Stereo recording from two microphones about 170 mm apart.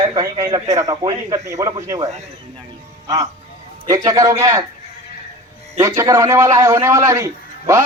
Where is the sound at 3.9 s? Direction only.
20° right (ahead or behind).